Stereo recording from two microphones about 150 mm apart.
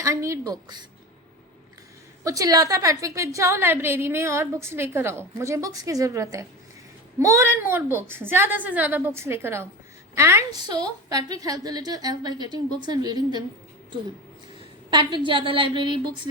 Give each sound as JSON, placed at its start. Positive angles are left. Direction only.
{"t": 0.0, "sound": "a woman's voice", "side_deg": -20}
{"t": 2.2, "sound": "a woman's voice", "side_deg": -25}
{"t": 14.8, "sound": "a woman's voice", "side_deg": -30}